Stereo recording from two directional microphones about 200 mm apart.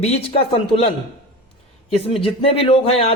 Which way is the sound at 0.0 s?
30° left (ahead or behind).